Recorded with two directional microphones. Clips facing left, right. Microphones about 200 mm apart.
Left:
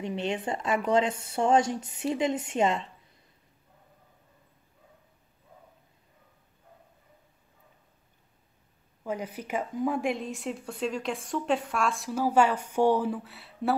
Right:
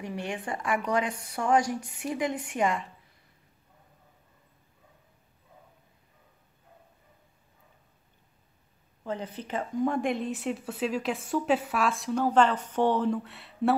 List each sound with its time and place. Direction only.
0.0 s speech: 20° left (ahead or behind)
9.0 s a woman's voice: 10° left (ahead or behind)